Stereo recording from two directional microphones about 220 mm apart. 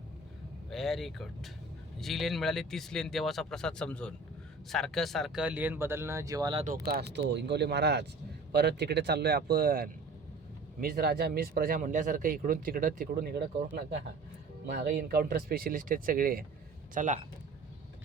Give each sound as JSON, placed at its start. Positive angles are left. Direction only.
{"t": 0.7, "sound": "speech", "side_deg": 0}
{"t": 6.8, "sound": "speech", "side_deg": -45}
{"t": 14.7, "sound": "speech", "side_deg": -40}